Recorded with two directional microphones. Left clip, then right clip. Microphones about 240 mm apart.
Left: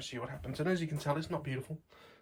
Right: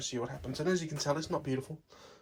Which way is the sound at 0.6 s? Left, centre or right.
Centre.